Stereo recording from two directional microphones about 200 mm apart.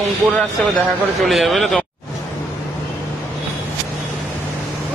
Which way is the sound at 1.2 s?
Centre (ahead or behind).